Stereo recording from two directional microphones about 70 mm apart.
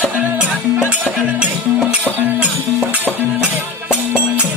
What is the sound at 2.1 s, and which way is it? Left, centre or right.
Music, right.